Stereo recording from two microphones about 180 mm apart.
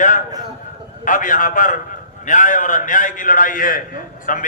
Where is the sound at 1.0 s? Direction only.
45° left (ahead or behind).